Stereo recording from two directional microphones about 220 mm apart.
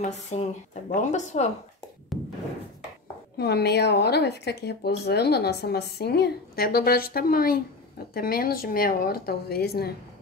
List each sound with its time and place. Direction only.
0.0 s speech: 30° left (ahead or behind)
3.3 s a woman's voice: 50° left (ahead or behind)